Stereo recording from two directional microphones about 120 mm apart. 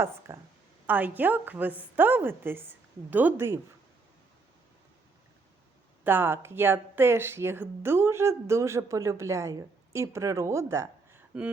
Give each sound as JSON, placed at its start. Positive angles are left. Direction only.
{"t": 0.3, "sound": "a woman's voice", "side_deg": -20}
{"t": 6.1, "sound": "speech", "side_deg": -20}